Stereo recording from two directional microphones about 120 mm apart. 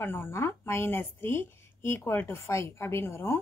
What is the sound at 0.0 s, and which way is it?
Speech, 20° left (ahead or behind).